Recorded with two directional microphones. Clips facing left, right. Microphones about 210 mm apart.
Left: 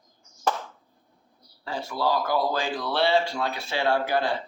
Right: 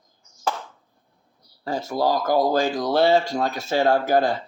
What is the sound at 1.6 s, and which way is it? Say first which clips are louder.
Speech: right 5 dB; 40° right (ahead or behind).